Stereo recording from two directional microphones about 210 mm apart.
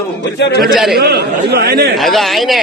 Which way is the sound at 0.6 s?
Centre (ahead or behind).